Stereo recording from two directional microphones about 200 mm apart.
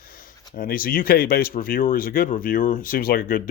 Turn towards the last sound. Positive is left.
turn(degrees=45)  # may be behind; listen again after turning